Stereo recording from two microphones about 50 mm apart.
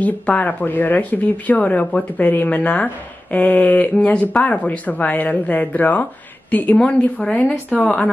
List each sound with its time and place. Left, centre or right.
0.0 s speech: left
6.8 s speech: left